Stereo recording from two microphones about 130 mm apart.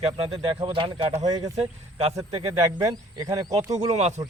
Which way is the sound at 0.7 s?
40° right (ahead or behind).